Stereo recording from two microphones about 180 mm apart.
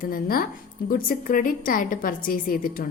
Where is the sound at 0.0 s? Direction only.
50° left (ahead or behind).